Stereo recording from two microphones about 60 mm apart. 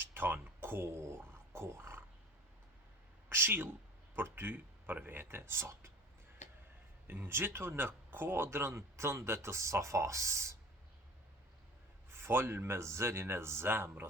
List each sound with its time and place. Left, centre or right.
0.0 s a sound: right
3.2 s speech: right
7.1 s speech: right
12.1 s speech: right